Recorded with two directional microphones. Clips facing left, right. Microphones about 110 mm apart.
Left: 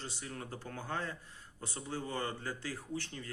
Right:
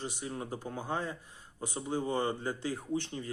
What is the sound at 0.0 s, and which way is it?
Speech, 15° right (ahead or behind).